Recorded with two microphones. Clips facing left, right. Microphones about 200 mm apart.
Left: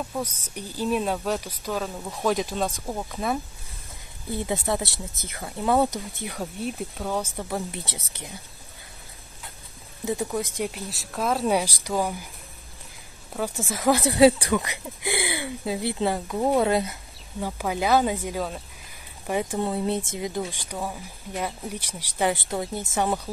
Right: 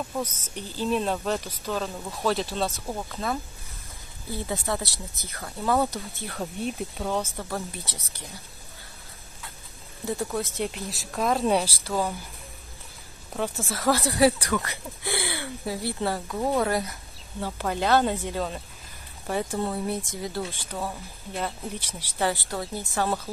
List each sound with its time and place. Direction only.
0.2 s speech: 10° left (ahead or behind)
6.4 s speech: centre (ahead or behind)
7.3 s speech: 15° left (ahead or behind)
10.2 s speech: 15° left (ahead or behind)
10.9 s speech: centre (ahead or behind)
11.6 s speech: 15° left (ahead or behind)
13.6 s speech: 15° left (ahead or behind)
17.4 s speech: 10° left (ahead or behind)